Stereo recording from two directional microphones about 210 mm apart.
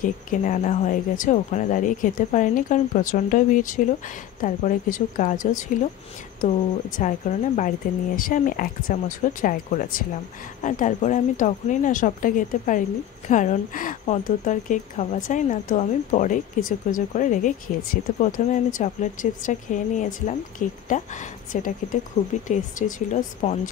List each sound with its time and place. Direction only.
0.0 s speech: 40° left (ahead or behind)